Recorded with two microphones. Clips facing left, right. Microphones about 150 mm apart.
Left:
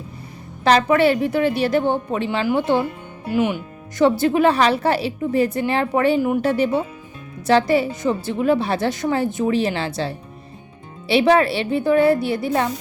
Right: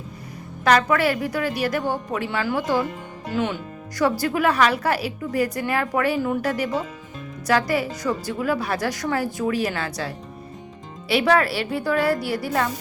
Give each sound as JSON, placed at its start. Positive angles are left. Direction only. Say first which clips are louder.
{"t": 0.6, "sound": "a woman's voice", "louder": "left 3 dB", "side_deg": 30}
{"t": 3.2, "sound": "a woman's voice", "louder": "left 5 dB", "side_deg": 15}